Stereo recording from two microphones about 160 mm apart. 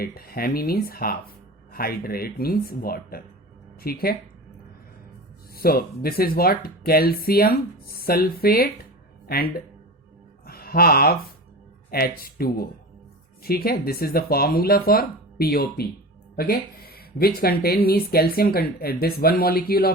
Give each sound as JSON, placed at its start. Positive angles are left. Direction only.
{"t": 0.0, "sound": "speech", "side_deg": 70}
{"t": 5.5, "sound": "speech", "side_deg": 70}